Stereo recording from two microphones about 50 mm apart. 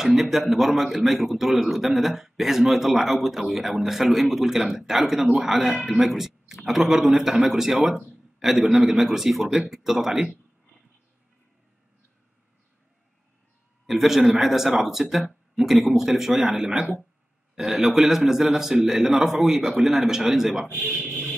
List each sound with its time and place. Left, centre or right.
0.0 s a man's voice: centre
13.8 s a man's voice: centre